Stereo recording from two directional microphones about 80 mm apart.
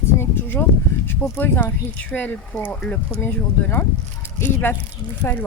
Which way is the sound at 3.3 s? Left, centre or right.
Left.